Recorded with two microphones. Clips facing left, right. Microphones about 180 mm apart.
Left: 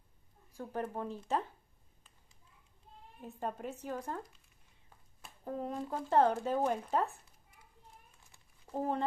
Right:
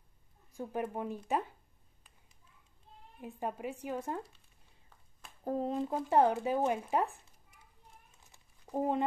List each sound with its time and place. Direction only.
0.6 s speech: 10° right (ahead or behind)
3.2 s speech: 10° right (ahead or behind)
5.4 s speech: 35° right (ahead or behind)
5.8 s speech: 20° right (ahead or behind)
8.1 s a sound: 20° right (ahead or behind)